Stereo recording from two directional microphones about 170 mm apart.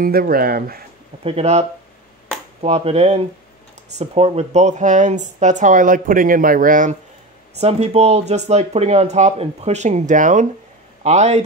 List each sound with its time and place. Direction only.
0.0 s speech: 60° right (ahead or behind)
1.2 s speech: 40° right (ahead or behind)
7.5 s speech: 40° right (ahead or behind)